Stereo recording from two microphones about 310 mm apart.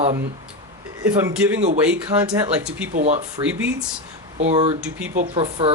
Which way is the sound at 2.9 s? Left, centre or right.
Right.